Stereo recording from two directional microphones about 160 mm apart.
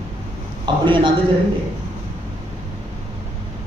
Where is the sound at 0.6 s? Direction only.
30° right (ahead or behind).